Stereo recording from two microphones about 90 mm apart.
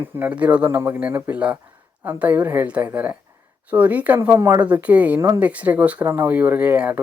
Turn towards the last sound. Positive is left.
turn(degrees=-15)  # may be behind; listen again after turning